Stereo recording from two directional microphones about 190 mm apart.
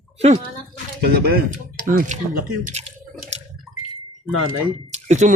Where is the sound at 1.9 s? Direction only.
45° right (ahead or behind).